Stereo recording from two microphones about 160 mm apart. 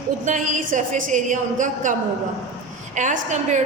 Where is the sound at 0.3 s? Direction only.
50° right (ahead or behind).